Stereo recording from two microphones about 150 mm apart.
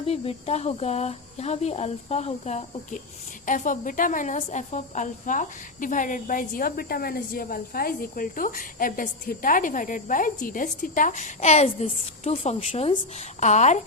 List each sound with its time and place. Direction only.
0.0 s speech: 40° left (ahead or behind)
3.4 s speech: 60° left (ahead or behind)